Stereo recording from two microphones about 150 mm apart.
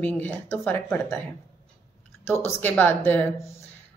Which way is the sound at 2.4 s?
10° left (ahead or behind).